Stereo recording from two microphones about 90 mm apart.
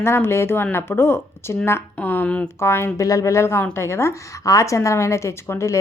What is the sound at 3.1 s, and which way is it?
A woman's voice, 40° left (ahead or behind).